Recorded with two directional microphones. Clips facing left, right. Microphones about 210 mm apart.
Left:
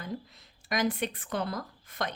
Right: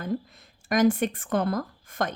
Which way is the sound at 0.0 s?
50° right (ahead or behind).